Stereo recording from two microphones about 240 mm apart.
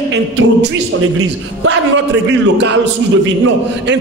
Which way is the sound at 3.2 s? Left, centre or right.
Right.